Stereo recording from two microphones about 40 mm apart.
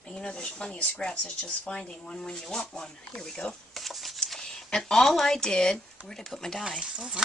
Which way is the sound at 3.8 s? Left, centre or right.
Centre.